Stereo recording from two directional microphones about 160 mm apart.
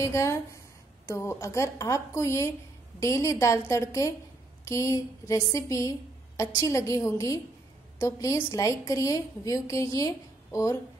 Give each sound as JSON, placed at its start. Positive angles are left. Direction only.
{"t": 0.0, "sound": "a woman's voice", "side_deg": 20}